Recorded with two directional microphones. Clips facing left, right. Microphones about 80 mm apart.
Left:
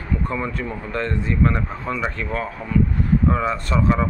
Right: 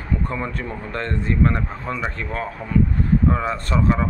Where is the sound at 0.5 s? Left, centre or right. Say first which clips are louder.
Left 2 dB; right.